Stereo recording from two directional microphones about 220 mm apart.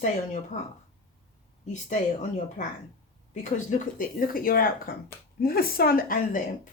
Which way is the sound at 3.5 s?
35° left (ahead or behind).